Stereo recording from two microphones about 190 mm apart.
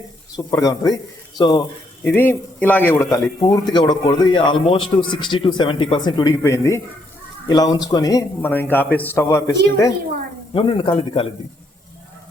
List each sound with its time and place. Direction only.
0.3 s a man's voice: 20° left (ahead or behind)
2.0 s a man's voice: 10° left (ahead or behind)
10.5 s a man's voice: 30° left (ahead or behind)